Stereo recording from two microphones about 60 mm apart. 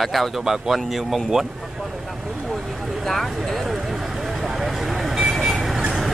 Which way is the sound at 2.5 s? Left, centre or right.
Centre.